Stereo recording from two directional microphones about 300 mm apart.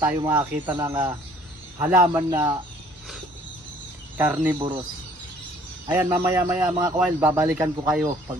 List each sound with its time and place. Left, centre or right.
0.0 s a man's voice: centre
4.2 s a man's voice: centre
5.9 s a man's voice: centre